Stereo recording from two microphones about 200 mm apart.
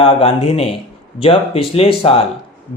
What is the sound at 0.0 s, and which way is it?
Speech, 30° left (ahead or behind).